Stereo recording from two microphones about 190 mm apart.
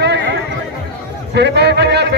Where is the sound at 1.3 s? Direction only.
60° right (ahead or behind).